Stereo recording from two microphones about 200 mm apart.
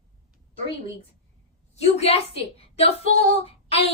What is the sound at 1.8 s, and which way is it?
A woman's voice, 30° left (ahead or behind).